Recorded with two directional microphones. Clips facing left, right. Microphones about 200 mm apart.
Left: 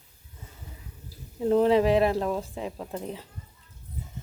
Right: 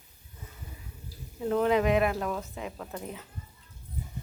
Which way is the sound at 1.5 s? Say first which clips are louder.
Left 4 dB; 30° left (ahead or behind).